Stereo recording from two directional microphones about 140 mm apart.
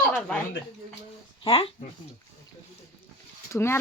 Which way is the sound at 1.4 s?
40° left (ahead or behind).